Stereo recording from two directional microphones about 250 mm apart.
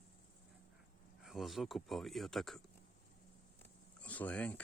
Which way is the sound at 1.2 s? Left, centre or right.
Centre.